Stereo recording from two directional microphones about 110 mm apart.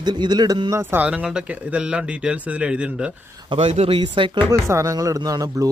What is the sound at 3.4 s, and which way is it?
Speech, 55° right (ahead or behind).